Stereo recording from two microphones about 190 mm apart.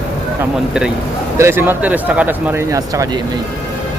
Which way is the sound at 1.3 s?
15° right (ahead or behind).